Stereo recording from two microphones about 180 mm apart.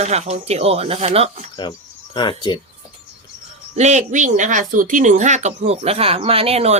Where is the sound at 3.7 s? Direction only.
40° right (ahead or behind).